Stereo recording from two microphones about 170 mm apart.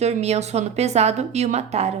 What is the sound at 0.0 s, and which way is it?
A woman's voice, 40° right (ahead or behind).